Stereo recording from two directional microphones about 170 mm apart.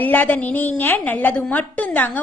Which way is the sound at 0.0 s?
10° left (ahead or behind).